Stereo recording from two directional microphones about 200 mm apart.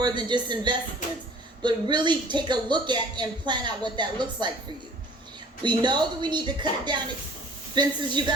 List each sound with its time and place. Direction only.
0.0 s speech: 20° right (ahead or behind)
5.6 s speech: 25° right (ahead or behind)